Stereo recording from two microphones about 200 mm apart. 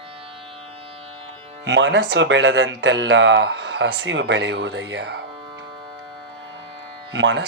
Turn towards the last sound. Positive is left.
turn(degrees=-65)  # may be behind; listen again after turning